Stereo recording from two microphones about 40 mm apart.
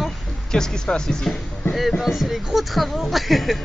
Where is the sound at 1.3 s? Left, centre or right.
Centre.